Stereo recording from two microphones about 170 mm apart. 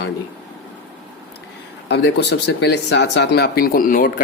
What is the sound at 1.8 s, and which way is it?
Speech, 85° left.